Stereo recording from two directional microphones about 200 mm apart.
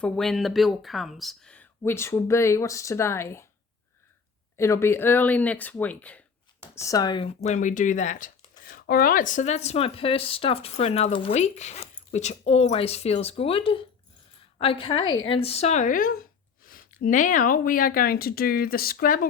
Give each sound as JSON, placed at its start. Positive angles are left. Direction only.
{"t": 0.0, "sound": "speech", "side_deg": 0}
{"t": 4.5, "sound": "a woman's voice", "side_deg": 15}